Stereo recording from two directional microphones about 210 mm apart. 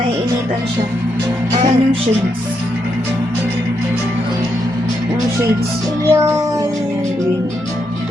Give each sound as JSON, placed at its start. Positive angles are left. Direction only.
{"t": 1.5, "sound": "music", "side_deg": -30}
{"t": 6.1, "sound": "music", "side_deg": -15}